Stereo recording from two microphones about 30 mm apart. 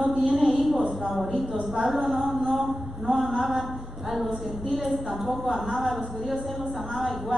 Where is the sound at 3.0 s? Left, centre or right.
Right.